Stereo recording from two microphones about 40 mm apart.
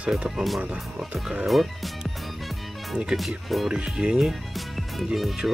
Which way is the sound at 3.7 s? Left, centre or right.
Right.